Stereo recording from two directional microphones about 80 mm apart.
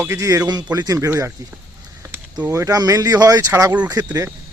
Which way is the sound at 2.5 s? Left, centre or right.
Right.